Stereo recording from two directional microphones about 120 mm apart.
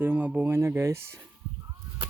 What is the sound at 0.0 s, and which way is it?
Speech, 10° right (ahead or behind).